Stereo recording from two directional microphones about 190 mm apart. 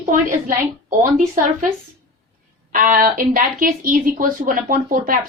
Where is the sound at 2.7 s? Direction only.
45° right (ahead or behind).